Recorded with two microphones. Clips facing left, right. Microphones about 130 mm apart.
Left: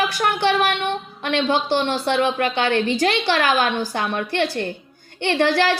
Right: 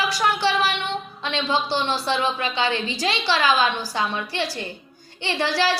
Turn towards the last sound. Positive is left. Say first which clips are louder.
# left 4 dB
turn(degrees=55)  # may be behind; listen again after turning